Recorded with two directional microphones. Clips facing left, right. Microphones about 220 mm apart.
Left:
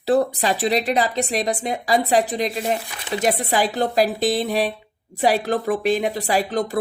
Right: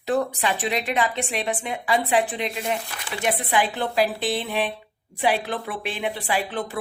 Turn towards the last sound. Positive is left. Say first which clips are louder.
# left 5 dB
turn(degrees=40)  # may be behind; listen again after turning